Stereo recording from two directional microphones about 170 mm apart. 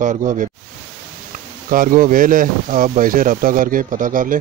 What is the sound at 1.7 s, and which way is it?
Speech, 55° right (ahead or behind).